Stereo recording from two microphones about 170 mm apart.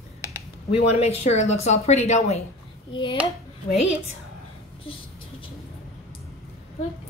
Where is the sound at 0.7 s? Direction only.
35° left (ahead or behind).